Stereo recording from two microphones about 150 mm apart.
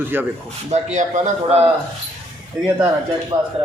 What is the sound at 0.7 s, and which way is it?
Speech, 50° right (ahead or behind).